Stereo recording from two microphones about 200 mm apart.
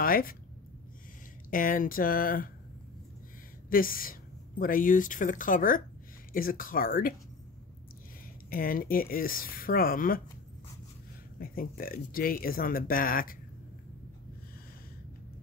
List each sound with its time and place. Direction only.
0.0 s speech: 45° left (ahead or behind)
1.5 s speech: 45° left (ahead or behind)
3.7 s speech: 45° left (ahead or behind)
8.5 s speech: 45° left (ahead or behind)
11.3 s speech: 45° left (ahead or behind)